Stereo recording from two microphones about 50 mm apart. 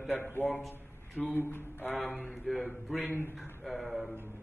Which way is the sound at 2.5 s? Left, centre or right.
Centre.